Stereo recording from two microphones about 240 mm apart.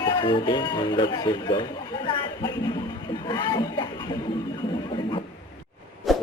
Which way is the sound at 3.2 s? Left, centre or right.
Centre.